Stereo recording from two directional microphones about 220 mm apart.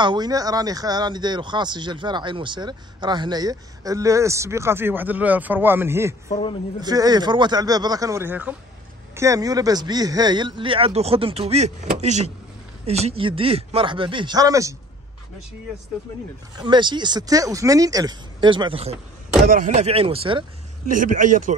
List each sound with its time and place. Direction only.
0.0 s speech: 20° right (ahead or behind)
16.5 s speech: 20° right (ahead or behind)
19.4 s speech: 35° right (ahead or behind)
20.9 s a man's voice: 35° right (ahead or behind)